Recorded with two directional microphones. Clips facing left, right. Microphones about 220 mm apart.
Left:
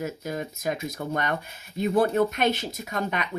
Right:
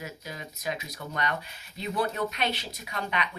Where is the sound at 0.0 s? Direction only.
50° left (ahead or behind).